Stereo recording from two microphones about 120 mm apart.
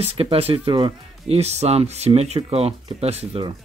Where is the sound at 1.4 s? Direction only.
65° right (ahead or behind).